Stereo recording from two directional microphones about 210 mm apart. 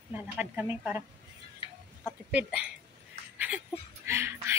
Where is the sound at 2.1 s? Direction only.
5° right (ahead or behind).